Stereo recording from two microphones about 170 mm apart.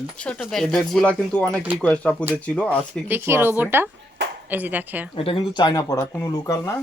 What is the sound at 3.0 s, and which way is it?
Speech, 15° right (ahead or behind).